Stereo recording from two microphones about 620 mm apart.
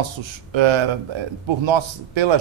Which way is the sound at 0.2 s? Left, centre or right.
Right.